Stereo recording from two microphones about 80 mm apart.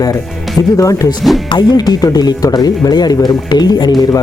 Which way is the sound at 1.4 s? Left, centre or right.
Left.